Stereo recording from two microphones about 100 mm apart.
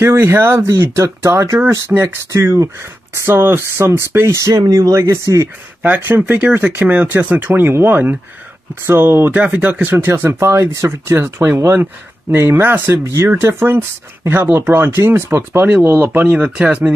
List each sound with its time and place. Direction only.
0.0 s speech: 25° right (ahead or behind)
4.6 s speech: 40° right (ahead or behind)
5.8 s speech: 20° right (ahead or behind)